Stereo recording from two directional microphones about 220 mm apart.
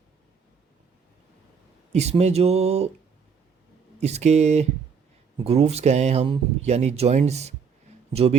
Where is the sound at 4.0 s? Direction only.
30° right (ahead or behind).